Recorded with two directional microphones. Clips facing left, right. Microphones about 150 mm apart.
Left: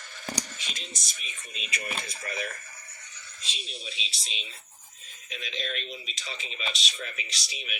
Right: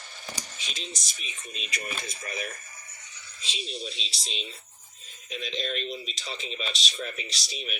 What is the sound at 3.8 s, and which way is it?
Speech, 5° left (ahead or behind).